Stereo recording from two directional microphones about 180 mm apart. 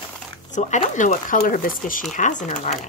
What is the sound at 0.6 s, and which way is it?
Speech, 40° left (ahead or behind).